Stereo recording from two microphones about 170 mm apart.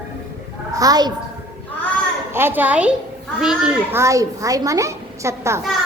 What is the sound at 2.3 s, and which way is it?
A child's voice, 15° right (ahead or behind).